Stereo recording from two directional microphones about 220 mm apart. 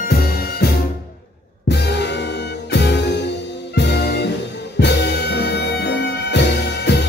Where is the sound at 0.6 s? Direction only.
50° left (ahead or behind).